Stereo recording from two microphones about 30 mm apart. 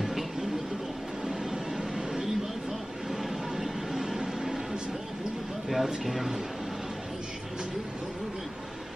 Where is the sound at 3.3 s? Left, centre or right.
Centre.